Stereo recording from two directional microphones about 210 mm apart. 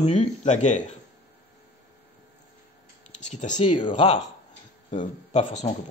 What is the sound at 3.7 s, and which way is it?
Speech, 25° left (ahead or behind).